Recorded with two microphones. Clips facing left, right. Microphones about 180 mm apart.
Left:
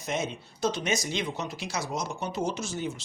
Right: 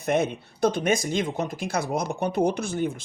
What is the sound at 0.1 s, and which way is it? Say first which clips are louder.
Speech: right 8 dB; 60° right (ahead or behind).